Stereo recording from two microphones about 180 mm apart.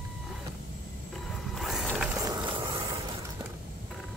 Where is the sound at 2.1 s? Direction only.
20° right (ahead or behind).